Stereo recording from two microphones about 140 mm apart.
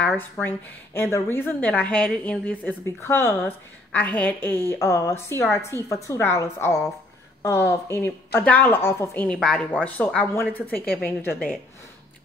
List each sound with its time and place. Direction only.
0.2 s a woman's voice: 15° left (ahead or behind)